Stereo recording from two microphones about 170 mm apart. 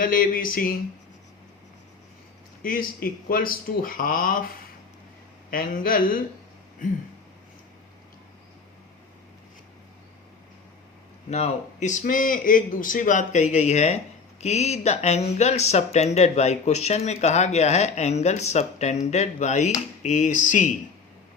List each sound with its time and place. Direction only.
0.0 s speech: 55° left (ahead or behind)
2.6 s speech: 55° left (ahead or behind)
5.5 s a man's voice: 60° left (ahead or behind)
11.3 s a man's voice: 40° left (ahead or behind)